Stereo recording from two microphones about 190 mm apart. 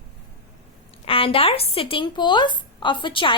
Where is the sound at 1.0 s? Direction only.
30° left (ahead or behind).